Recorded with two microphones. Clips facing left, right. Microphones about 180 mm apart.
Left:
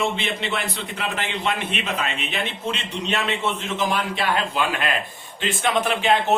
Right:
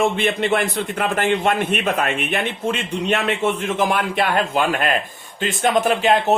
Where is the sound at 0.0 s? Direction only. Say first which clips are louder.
Right 6 dB; 50° right (ahead or behind).